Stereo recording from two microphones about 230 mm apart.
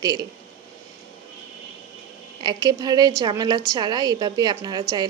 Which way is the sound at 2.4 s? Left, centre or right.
Centre.